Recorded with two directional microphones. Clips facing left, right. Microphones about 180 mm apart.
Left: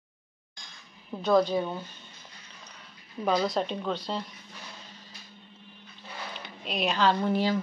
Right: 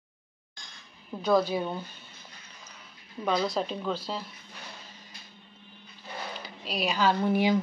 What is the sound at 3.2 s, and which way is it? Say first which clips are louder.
Speech: left 1 dB; centre (ahead or behind).